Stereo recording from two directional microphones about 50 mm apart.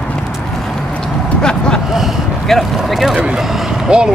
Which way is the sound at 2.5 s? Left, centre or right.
Centre.